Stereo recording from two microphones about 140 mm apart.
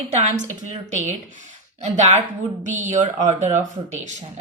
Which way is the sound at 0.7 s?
55° right (ahead or behind).